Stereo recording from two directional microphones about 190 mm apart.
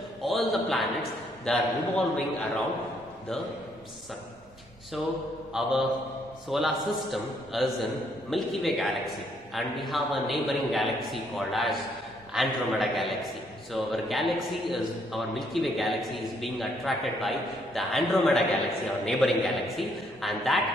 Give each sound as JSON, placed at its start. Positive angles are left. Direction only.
{"t": 0.2, "sound": "a sound", "side_deg": 0}
{"t": 1.4, "sound": "a man's voice", "side_deg": 5}
{"t": 5.5, "sound": "a man's voice", "side_deg": -5}